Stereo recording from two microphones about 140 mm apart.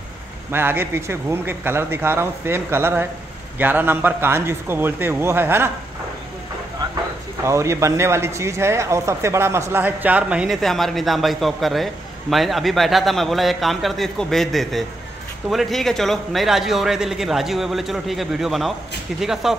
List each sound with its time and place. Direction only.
0.5 s speech: 15° right (ahead or behind)
7.4 s speech: 20° right (ahead or behind); by 19.5 s 5° right (ahead or behind)